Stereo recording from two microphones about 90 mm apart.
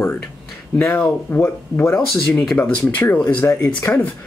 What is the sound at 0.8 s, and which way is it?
Speech, 30° left (ahead or behind).